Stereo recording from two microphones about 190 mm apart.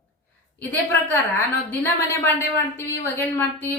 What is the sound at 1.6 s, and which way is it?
Speech, 10° left (ahead or behind).